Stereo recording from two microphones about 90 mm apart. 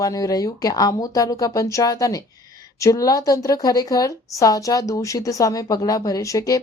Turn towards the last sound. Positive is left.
turn(degrees=40)  # may be behind; listen again after turning